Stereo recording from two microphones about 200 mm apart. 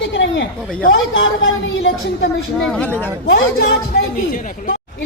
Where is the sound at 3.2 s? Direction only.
50° left (ahead or behind).